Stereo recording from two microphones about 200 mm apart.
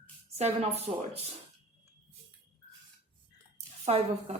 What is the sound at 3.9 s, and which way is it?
Speech, 35° right (ahead or behind).